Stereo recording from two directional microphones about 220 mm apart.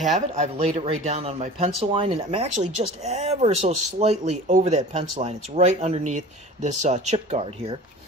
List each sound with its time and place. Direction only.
0.4 s speech: 30° right (ahead or behind)